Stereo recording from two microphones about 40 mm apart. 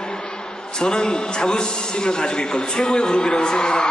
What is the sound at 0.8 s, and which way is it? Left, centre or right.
Speech, centre.